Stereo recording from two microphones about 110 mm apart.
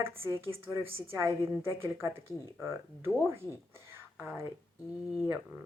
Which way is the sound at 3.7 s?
25° right (ahead or behind).